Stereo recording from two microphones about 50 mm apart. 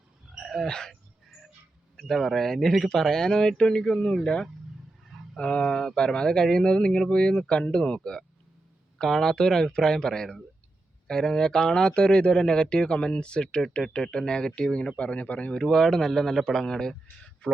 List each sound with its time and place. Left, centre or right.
0.4 s a sound: centre
2.0 s speech: centre; by 15.5 s left
15.5 s speech: centre